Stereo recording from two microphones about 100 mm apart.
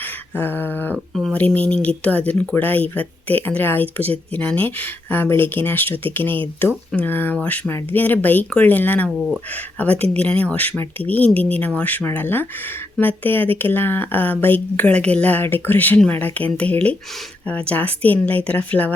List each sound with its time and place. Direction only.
0.0 s a sound: 20° left (ahead or behind)
0.9 s speech: centre (ahead or behind)
1.3 s speech: 15° left (ahead or behind)